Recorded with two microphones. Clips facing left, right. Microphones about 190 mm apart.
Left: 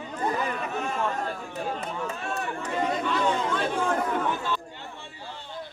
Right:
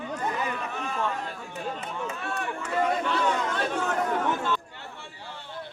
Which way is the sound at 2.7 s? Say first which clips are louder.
Right 1 dB; 15° left (ahead or behind).